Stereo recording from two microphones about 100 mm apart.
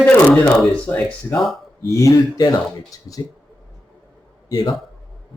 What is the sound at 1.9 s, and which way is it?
Speech, 35° left (ahead or behind).